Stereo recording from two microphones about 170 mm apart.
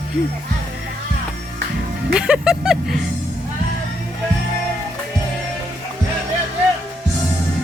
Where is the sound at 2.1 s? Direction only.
5° right (ahead or behind).